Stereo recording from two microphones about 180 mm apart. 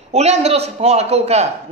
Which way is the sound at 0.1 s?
35° right (ahead or behind).